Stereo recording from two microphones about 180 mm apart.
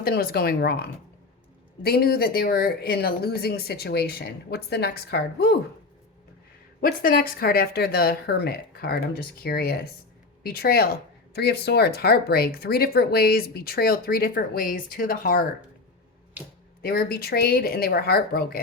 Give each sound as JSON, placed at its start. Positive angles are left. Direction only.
{"t": 0.0, "sound": "speech", "side_deg": 55}
{"t": 6.8, "sound": "speech", "side_deg": 55}
{"t": 16.8, "sound": "speech", "side_deg": 55}